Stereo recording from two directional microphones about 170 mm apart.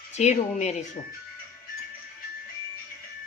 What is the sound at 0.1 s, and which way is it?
Speech, 40° left (ahead or behind).